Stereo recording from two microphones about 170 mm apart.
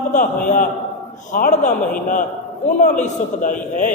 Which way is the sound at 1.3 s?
45° left (ahead or behind).